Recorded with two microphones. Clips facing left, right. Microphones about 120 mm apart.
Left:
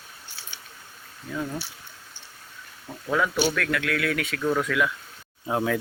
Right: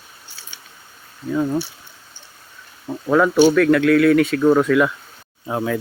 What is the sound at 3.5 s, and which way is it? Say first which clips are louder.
Speech: right 13 dB; 40° right (ahead or behind).